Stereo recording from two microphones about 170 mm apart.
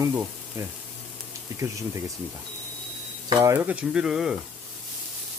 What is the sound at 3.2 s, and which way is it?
Speech, 20° right (ahead or behind).